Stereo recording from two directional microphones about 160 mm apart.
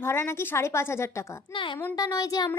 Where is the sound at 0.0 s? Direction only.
15° left (ahead or behind).